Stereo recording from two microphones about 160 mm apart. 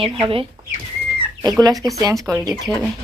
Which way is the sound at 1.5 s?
25° right (ahead or behind).